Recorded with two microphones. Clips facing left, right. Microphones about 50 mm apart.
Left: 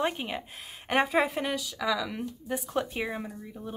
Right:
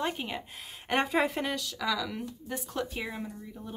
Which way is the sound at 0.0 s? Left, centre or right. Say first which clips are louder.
Left 3 dB; centre.